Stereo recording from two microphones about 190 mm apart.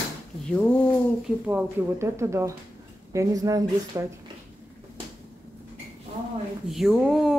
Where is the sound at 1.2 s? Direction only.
5° right (ahead or behind).